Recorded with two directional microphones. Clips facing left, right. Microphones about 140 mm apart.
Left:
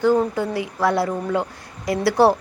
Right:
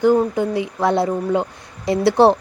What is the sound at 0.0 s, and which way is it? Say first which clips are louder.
Speech: right 3 dB; 20° right (ahead or behind).